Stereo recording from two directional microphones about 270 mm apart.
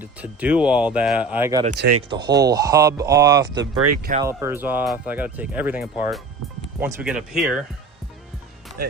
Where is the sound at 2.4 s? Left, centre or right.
Centre.